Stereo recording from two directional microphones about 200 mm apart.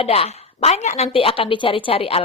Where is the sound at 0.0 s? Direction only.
30° left (ahead or behind).